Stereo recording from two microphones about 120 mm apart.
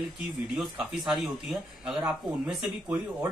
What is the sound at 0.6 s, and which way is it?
Speech, 10° right (ahead or behind).